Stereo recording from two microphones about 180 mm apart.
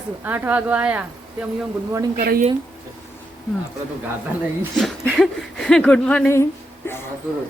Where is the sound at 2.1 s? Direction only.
50° right (ahead or behind).